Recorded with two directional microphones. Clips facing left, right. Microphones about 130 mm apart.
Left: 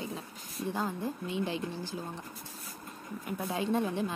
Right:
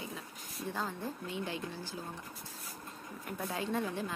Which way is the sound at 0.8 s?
15° left (ahead or behind).